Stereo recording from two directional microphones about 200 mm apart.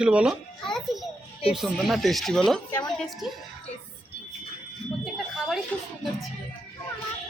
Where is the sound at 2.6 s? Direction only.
20° left (ahead or behind).